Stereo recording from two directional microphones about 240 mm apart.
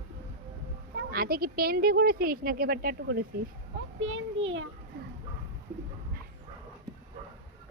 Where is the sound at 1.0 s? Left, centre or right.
Right.